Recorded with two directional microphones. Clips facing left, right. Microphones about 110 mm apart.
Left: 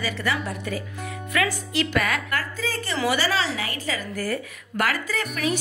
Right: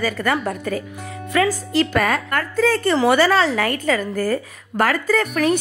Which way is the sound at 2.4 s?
60° right (ahead or behind).